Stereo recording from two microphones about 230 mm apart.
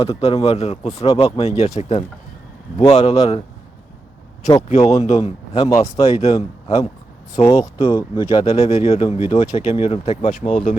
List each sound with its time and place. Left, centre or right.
0.0 s speech: left
4.8 s speech: left
7.9 s speech: centre
8.4 s speech: left